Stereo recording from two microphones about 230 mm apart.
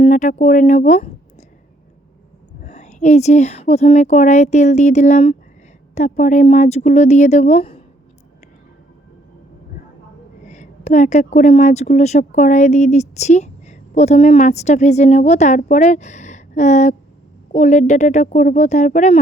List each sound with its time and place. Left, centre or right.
0.0 s speech: left
2.6 s a woman's voice: left
10.4 s speech: left